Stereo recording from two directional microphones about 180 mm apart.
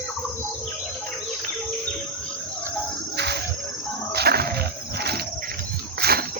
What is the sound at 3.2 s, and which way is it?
Cricket, 70° right (ahead or behind).